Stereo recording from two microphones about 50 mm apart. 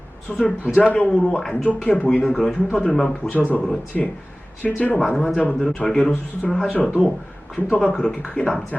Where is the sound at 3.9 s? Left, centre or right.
Centre.